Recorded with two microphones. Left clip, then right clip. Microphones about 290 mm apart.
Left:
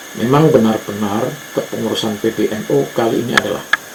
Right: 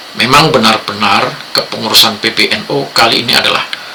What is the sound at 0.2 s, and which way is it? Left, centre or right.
Speech, right.